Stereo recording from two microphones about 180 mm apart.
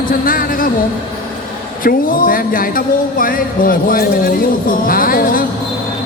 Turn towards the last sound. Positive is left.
turn(degrees=50)  # may be behind; listen again after turning